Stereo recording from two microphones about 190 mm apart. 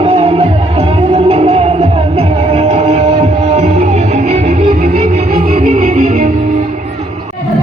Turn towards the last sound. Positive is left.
turn(degrees=-35)  # may be behind; listen again after turning